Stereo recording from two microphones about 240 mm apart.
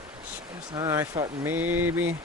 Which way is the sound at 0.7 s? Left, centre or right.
Centre.